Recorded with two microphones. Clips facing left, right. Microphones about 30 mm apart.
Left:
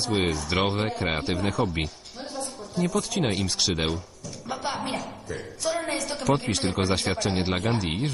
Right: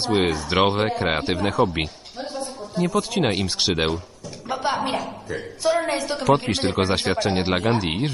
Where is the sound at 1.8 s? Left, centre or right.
Right.